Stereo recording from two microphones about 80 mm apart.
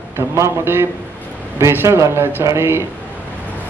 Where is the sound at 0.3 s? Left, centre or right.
Right.